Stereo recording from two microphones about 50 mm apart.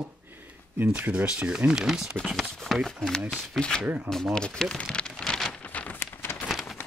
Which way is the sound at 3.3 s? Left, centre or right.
Centre.